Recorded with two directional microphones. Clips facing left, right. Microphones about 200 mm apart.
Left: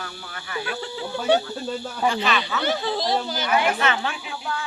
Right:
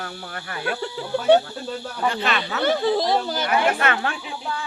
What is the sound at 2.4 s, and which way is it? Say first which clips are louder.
Speech: right 4 dB; 55° right (ahead or behind).